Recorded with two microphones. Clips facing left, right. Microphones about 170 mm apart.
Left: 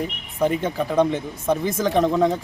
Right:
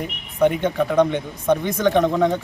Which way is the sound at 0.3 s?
5° left (ahead or behind).